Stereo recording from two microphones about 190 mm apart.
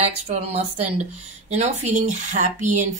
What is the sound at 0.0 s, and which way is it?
Speech, 35° right (ahead or behind).